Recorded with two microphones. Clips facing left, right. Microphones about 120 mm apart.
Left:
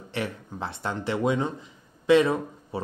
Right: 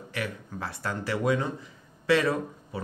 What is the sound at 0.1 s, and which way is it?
Speech, 25° left (ahead or behind).